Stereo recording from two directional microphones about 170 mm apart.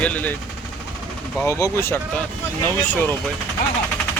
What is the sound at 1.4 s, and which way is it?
Speech, 15° left (ahead or behind).